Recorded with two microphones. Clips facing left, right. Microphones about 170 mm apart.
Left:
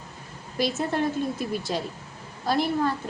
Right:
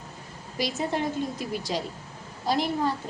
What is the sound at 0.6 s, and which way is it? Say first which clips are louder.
A woman's voice: left 3 dB; 15° right (ahead or behind).